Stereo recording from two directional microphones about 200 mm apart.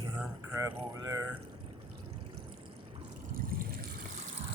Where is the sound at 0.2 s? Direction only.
15° right (ahead or behind).